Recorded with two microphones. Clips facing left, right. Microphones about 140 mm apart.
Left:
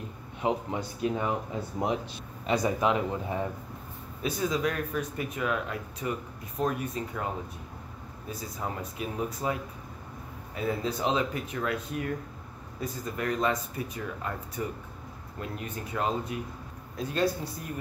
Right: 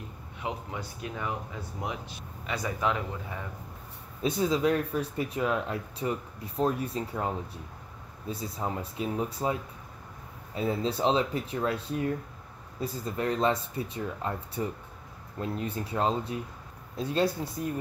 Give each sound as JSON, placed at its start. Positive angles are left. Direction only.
{"t": 0.4, "sound": "speech", "side_deg": 25}
{"t": 4.2, "sound": "speech", "side_deg": -30}
{"t": 8.3, "sound": "speech", "side_deg": -30}